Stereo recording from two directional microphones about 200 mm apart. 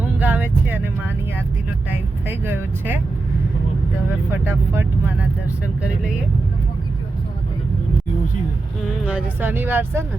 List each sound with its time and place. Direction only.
0.2 s vehicle: 10° right (ahead or behind)
2.2 s speech: 10° right (ahead or behind)
4.3 s speech: 10° right (ahead or behind)
9.0 s speech: 10° right (ahead or behind)